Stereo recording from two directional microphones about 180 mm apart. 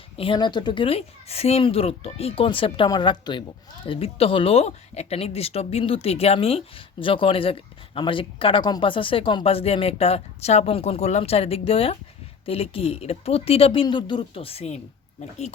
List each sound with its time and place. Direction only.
0.2 s a woman's voice: 25° left (ahead or behind)